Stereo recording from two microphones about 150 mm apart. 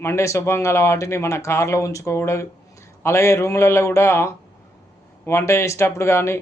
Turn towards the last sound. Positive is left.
turn(degrees=15)  # may be behind; listen again after turning